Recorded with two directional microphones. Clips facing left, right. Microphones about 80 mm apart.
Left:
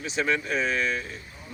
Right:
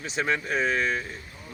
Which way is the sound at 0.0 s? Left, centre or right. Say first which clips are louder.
Left 1 dB; right.